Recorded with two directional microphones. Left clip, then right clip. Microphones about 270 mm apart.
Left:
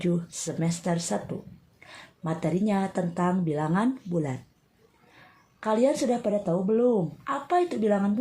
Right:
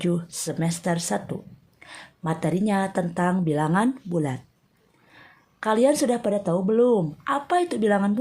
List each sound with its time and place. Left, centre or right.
0.0 s speech: right
5.5 s a woman's voice: right